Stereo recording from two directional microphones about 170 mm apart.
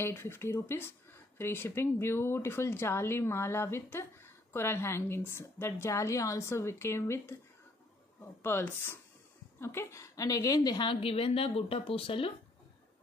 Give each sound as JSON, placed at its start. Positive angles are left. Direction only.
{"t": 0.0, "sound": "a woman's voice", "side_deg": 15}
{"t": 8.4, "sound": "a woman's voice", "side_deg": 15}